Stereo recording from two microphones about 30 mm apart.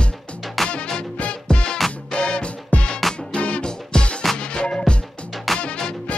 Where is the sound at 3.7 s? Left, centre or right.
Left.